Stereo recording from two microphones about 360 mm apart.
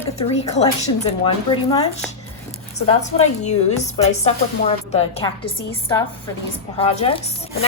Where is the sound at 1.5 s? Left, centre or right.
Centre.